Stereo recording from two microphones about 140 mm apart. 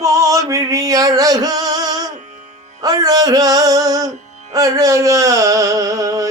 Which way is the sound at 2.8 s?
25° right (ahead or behind).